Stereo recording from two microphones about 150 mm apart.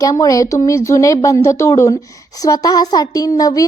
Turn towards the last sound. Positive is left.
turn(degrees=25)  # may be behind; listen again after turning